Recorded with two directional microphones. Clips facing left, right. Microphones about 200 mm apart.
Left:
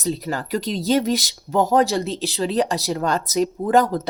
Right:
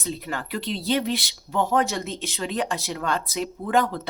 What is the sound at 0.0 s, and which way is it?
Speech, 35° left (ahead or behind).